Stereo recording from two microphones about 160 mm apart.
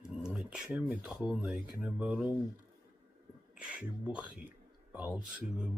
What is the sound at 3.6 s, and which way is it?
Speech, 5° right (ahead or behind).